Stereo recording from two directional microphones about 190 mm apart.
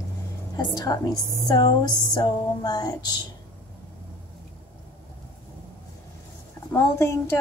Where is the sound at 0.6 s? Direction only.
20° left (ahead or behind).